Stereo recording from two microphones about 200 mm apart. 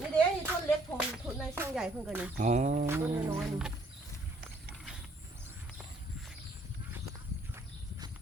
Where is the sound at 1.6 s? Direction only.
5° right (ahead or behind).